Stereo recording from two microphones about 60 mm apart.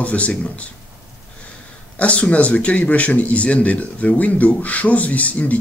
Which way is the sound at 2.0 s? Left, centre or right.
Left.